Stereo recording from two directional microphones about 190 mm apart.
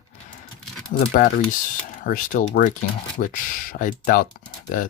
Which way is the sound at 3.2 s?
55° left (ahead or behind).